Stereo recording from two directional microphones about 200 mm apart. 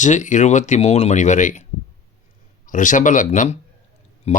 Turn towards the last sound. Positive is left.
turn(degrees=35)  # may be behind; listen again after turning